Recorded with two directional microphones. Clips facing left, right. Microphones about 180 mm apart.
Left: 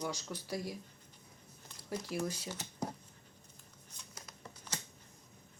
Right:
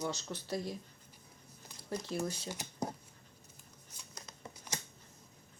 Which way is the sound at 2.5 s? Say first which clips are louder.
Right 1 dB; 15° right (ahead or behind).